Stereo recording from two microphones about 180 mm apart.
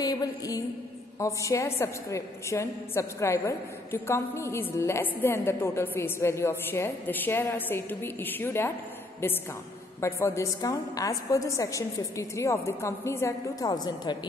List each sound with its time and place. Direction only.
0.0 s a sound: 20° left (ahead or behind)
1.2 s a woman's voice: 15° left (ahead or behind)
9.9 s a woman's voice: 15° left (ahead or behind)